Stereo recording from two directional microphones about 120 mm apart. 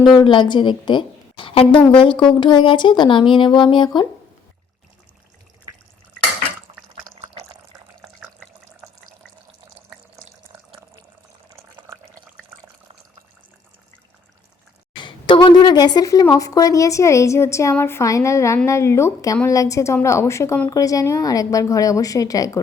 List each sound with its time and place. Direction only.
0.2 s speech: 40° left (ahead or behind)
14.9 s a sound: 40° left (ahead or behind)
16.3 s a woman's voice: 30° left (ahead or behind)